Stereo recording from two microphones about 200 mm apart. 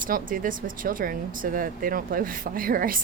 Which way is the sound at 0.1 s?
45° right (ahead or behind).